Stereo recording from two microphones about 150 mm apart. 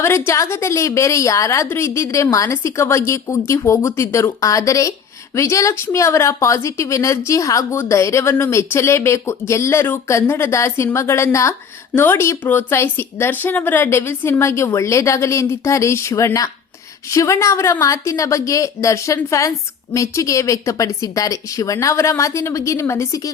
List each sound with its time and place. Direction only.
0.0 s a woman's voice: 15° left (ahead or behind)